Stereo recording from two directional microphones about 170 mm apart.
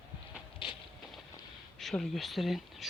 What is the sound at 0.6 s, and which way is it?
Clip-clop, 30° left (ahead or behind).